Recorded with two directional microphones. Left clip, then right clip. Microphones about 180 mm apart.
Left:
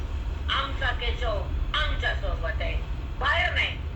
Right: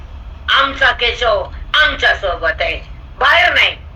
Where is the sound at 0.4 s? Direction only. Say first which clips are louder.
Right 16 dB; 55° right (ahead or behind).